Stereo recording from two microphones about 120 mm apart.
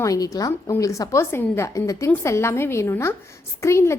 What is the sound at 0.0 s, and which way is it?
A woman's voice, 30° left (ahead or behind).